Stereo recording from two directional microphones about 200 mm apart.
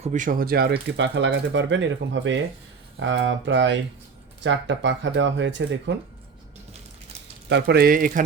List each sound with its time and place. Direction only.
0.0 s speech: 40° right (ahead or behind); by 6.0 s 65° right (ahead or behind)
7.5 s speech: 55° right (ahead or behind)